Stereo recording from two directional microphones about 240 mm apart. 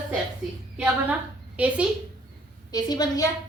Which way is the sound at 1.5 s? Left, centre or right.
Centre.